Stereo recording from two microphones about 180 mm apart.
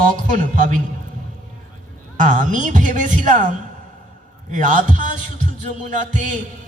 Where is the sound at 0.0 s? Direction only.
45° right (ahead or behind).